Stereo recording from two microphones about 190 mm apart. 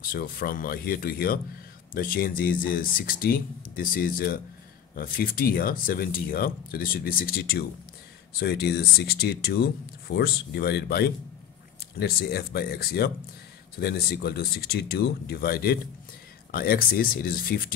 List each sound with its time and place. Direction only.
0.1 s speech: 50° left (ahead or behind)